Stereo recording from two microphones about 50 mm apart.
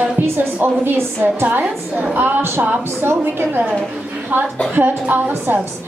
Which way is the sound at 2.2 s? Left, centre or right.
Right.